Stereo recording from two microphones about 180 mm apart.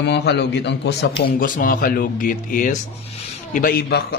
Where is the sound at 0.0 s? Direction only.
70° left (ahead or behind).